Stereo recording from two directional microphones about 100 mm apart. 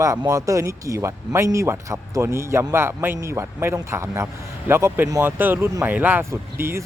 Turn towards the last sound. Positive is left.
turn(degrees=-25)  # may be behind; listen again after turning